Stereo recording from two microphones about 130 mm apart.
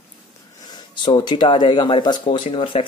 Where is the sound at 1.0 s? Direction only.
35° left (ahead or behind).